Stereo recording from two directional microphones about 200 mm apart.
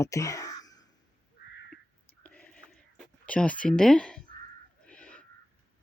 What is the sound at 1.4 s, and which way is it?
Crow, 55° left (ahead or behind).